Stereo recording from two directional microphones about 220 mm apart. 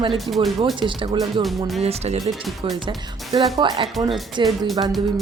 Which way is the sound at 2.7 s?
20° right (ahead or behind).